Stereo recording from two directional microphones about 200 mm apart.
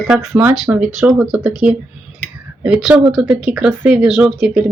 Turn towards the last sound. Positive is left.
turn(degrees=-5)  # may be behind; listen again after turning